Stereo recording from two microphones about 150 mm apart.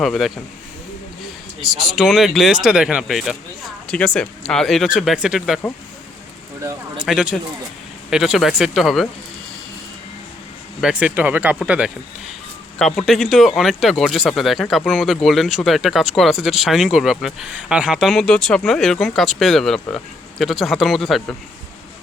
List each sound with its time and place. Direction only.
0.0 s speech: centre (ahead or behind)
1.6 s speech: centre (ahead or behind)
6.6 s speech: 20° right (ahead or behind)
7.0 s speech: 5° right (ahead or behind)
10.8 s speech: 5° right (ahead or behind)